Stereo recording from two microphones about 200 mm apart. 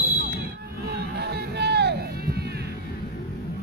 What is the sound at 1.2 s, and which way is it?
Music, 55° right (ahead or behind).